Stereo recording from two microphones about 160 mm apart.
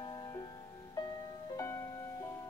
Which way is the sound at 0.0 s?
25° left (ahead or behind).